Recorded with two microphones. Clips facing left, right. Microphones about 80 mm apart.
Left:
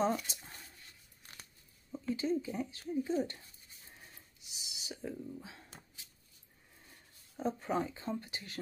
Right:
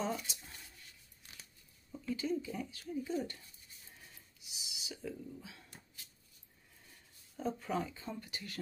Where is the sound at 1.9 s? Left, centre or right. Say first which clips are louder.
Left 3 dB; left.